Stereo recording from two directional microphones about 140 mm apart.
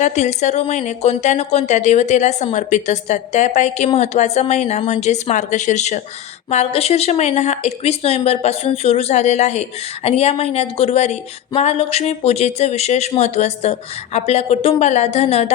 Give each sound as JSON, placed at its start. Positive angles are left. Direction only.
{"t": 0.0, "sound": "speech", "side_deg": 55}